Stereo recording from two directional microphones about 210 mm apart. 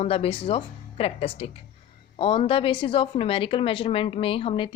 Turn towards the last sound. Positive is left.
turn(degrees=25)  # may be behind; listen again after turning